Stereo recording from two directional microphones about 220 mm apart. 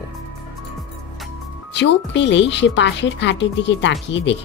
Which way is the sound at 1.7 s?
55° left (ahead or behind).